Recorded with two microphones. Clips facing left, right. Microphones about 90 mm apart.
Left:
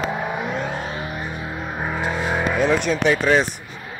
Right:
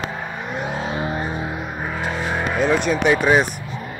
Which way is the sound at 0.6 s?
20° right (ahead or behind).